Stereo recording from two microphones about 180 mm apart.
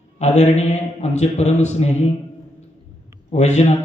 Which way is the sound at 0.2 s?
40° left (ahead or behind).